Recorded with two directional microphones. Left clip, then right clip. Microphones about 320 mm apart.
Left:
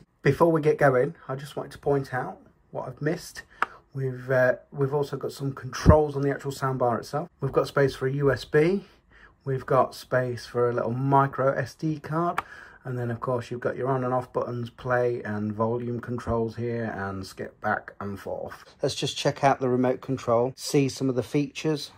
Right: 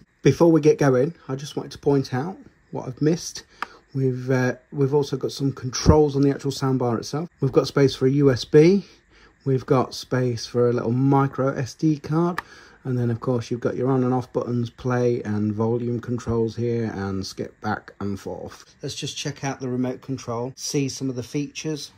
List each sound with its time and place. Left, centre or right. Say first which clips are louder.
0.2 s speech: right 4 dB; centre
20.2 s speech: left 7 dB; left
20.6 s speech: left 1 dB; centre